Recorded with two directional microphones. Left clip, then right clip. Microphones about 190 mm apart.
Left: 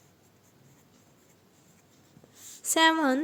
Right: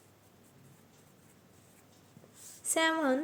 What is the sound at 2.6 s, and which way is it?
Speech, 30° left (ahead or behind).